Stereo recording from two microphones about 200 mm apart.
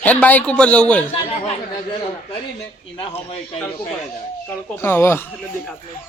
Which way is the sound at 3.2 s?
30° left (ahead or behind).